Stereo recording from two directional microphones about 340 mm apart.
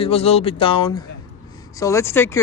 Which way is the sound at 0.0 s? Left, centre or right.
Centre.